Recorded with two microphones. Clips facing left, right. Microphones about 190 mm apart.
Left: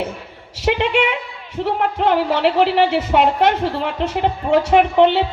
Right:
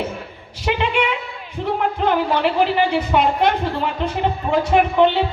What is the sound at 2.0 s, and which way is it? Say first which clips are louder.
Speech: left 2 dB; 70° left (ahead or behind).